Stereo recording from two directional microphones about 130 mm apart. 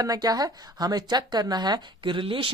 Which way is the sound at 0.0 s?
30° right (ahead or behind).